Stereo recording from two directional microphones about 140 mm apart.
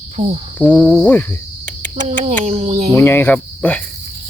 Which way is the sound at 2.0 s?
55° right (ahead or behind).